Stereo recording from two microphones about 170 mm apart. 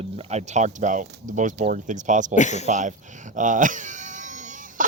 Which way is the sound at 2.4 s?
45° left (ahead or behind).